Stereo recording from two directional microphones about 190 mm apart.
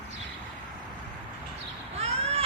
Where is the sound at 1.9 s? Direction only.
35° right (ahead or behind).